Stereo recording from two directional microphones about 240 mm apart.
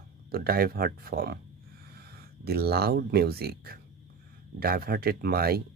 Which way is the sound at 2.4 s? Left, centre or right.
Right.